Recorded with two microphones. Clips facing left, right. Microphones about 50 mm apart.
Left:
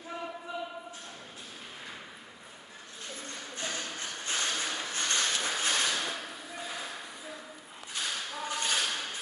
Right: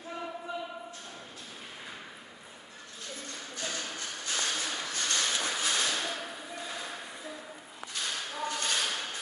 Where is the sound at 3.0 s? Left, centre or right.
Left.